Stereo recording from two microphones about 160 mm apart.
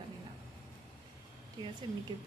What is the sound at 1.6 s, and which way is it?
Speech, 30° right (ahead or behind).